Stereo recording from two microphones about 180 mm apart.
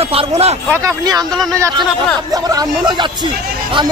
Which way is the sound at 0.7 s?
20° right (ahead or behind).